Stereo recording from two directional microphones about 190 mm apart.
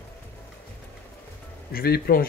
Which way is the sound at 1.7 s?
55° left (ahead or behind).